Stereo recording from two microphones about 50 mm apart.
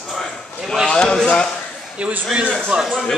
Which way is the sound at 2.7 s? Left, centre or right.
Right.